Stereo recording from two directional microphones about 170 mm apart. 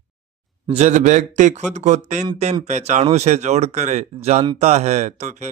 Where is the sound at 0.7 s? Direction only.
45° right (ahead or behind).